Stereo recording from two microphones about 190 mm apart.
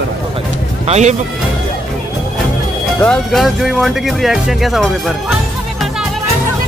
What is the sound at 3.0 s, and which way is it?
Speech, 5° left (ahead or behind).